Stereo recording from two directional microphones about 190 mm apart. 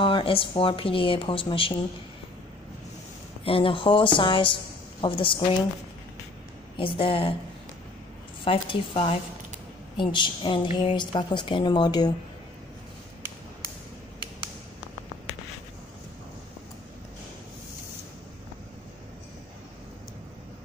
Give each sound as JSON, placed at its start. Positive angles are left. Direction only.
{"t": 0.0, "sound": "a woman's voice", "side_deg": 25}
{"t": 3.4, "sound": "a woman's voice", "side_deg": 30}
{"t": 6.8, "sound": "a woman's voice", "side_deg": 25}
{"t": 8.5, "sound": "a woman's voice", "side_deg": 30}